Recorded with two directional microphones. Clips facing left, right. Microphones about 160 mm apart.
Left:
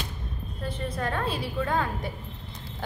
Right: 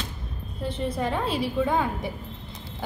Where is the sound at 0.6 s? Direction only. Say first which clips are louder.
Right 4 dB; 20° right (ahead or behind).